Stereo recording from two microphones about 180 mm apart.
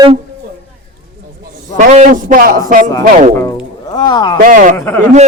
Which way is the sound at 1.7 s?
40° right (ahead or behind).